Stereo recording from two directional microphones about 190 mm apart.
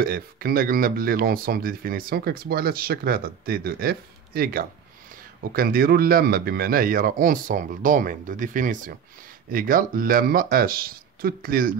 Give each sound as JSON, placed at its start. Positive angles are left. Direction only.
{"t": 0.0, "sound": "speech", "side_deg": -50}